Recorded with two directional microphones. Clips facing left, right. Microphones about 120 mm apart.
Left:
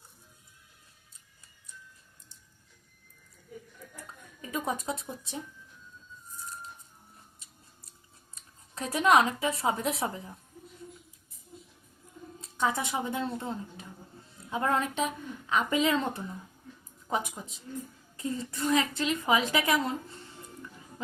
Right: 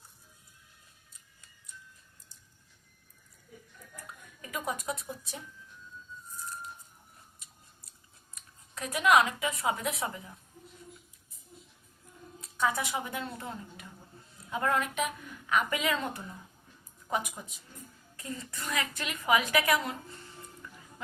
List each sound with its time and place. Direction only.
4.4 s a woman's voice: 25° left (ahead or behind)
8.4 s speech: 30° left (ahead or behind)
12.4 s a woman's voice: 25° left (ahead or behind)